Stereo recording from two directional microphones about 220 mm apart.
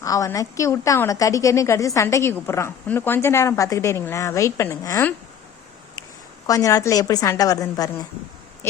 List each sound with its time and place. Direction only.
0.0 s a woman's voice: 15° left (ahead or behind)
6.5 s a woman's voice: 15° left (ahead or behind)